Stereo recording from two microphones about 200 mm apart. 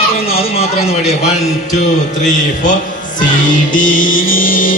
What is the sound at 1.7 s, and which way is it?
Speech, 40° left (ahead or behind).